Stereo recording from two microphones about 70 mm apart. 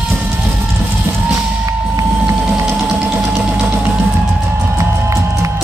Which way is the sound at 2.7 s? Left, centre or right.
Centre.